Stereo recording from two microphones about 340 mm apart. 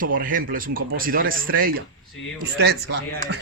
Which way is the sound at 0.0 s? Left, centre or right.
Right.